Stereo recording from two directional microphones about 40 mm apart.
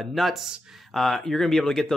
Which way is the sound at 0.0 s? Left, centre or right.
Centre.